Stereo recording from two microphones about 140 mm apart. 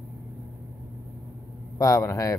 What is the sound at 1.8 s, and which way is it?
Speech, 25° left (ahead or behind).